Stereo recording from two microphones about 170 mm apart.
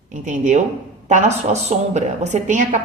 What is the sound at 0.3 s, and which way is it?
A woman's voice, 45° right (ahead or behind).